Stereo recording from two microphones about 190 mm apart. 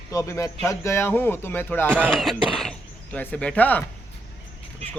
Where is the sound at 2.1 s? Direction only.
Centre (ahead or behind).